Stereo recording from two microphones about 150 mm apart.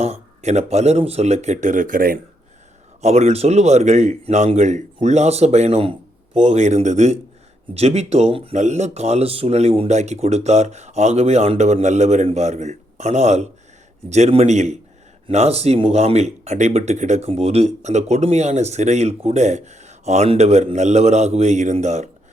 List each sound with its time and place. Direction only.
0.0 s speech: 45° right (ahead or behind); by 2.1 s 70° right (ahead or behind)
3.0 s speech: 45° right (ahead or behind)